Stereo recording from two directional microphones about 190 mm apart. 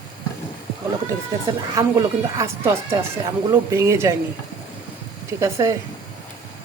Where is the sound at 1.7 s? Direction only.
15° right (ahead or behind).